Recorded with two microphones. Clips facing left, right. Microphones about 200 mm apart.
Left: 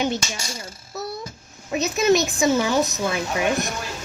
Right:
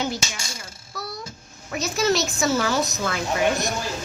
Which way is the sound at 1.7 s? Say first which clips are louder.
Left 4 dB; 20° left (ahead or behind).